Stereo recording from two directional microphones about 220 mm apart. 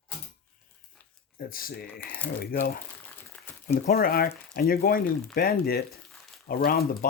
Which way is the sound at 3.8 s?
45° left (ahead or behind).